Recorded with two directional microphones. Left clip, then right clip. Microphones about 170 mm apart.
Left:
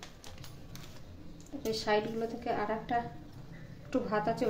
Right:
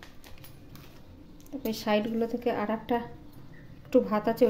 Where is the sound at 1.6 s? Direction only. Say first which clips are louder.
Right 2 dB; 40° right (ahead or behind).